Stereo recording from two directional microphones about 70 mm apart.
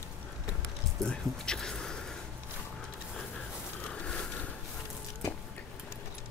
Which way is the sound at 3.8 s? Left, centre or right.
Centre.